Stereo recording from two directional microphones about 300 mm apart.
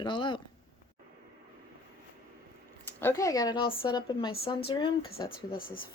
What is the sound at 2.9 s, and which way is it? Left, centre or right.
Speech, centre.